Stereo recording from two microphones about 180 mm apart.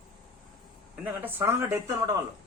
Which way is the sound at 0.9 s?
10° right (ahead or behind).